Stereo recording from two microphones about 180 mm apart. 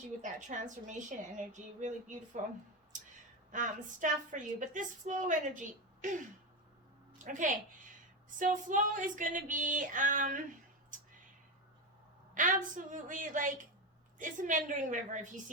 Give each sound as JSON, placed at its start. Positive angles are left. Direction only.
{"t": 0.2, "sound": "a woman's voice", "side_deg": -45}
{"t": 3.5, "sound": "a woman's voice", "side_deg": -45}
{"t": 7.3, "sound": "a woman's voice", "side_deg": -45}
{"t": 10.9, "sound": "a sound", "side_deg": -45}
{"t": 12.3, "sound": "a woman's voice", "side_deg": -45}